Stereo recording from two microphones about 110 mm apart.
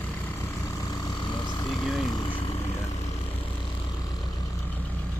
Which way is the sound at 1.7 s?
Centre (ahead or behind).